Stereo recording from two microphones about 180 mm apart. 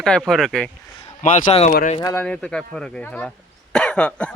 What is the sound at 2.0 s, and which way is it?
Speech, 15° left (ahead or behind).